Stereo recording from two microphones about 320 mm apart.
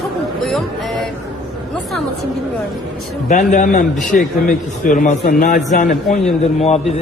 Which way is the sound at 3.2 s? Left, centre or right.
Left.